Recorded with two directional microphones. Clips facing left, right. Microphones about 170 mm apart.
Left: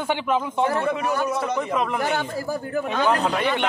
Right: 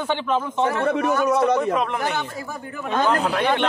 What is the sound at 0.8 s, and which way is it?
Speech, 70° right (ahead or behind).